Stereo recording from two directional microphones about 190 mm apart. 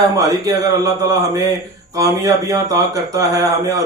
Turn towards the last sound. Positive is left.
turn(degrees=-20)  # may be behind; listen again after turning